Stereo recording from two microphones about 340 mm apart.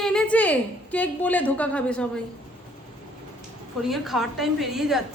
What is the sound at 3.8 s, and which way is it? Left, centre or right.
A woman's voice, centre.